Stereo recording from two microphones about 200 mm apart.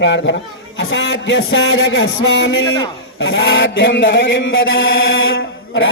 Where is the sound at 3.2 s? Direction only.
70° left (ahead or behind).